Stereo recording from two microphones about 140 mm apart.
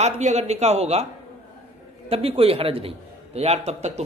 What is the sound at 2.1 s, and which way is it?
Speech, 45° right (ahead or behind).